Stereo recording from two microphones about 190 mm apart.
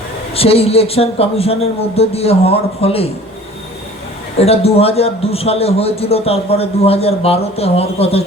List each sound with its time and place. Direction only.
0.3 s a man's voice: 30° left (ahead or behind)
4.4 s a man's voice: 30° left (ahead or behind)